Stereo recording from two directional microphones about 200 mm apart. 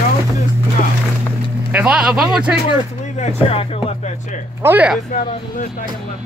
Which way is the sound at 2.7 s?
30° left (ahead or behind).